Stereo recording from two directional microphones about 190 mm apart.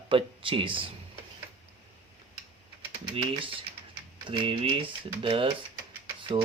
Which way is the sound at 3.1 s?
25° right (ahead or behind).